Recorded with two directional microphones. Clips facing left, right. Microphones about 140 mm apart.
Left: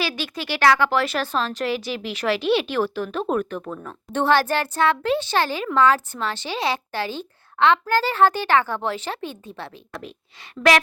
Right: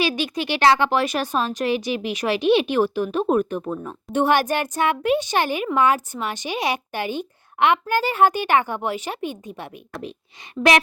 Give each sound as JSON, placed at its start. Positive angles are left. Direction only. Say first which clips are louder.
{"t": 0.2, "sound": "a woman's voice", "louder": "right 2 dB", "side_deg": -20}